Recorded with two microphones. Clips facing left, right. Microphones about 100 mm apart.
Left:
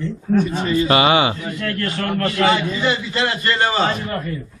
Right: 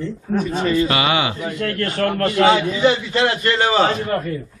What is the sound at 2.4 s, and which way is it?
A man's voice, 65° right (ahead or behind).